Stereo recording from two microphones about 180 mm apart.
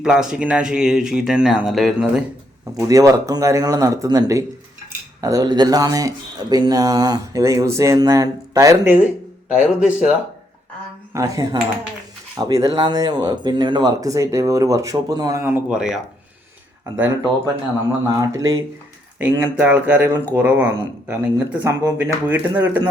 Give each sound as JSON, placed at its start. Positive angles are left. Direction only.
{"t": 0.0, "sound": "speech", "side_deg": -5}
{"t": 2.7, "sound": "speech", "side_deg": -20}
{"t": 11.1, "sound": "speech", "side_deg": -20}
{"t": 18.2, "sound": "speech", "side_deg": -20}